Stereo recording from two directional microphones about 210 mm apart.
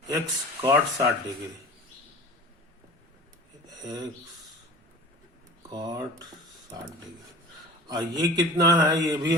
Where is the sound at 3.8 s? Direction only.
20° right (ahead or behind).